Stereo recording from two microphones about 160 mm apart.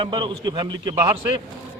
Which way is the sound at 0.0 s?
30° right (ahead or behind).